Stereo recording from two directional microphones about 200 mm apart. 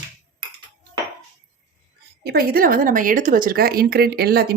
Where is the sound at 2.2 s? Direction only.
50° right (ahead or behind).